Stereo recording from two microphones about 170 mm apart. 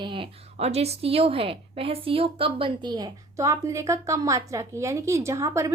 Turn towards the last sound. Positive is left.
turn(degrees=-20)  # may be behind; listen again after turning